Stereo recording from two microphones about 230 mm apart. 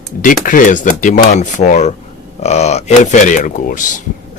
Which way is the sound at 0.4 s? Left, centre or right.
Left.